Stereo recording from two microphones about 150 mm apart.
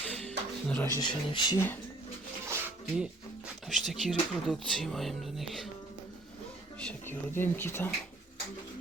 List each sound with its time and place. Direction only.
0.2 s music: 5° left (ahead or behind)
0.9 s speech: 30° left (ahead or behind)
1.5 s speech: 15° left (ahead or behind)
2.5 s a sound: 10° right (ahead or behind)
3.7 s speech: centre (ahead or behind)
6.7 s speech: 10° left (ahead or behind)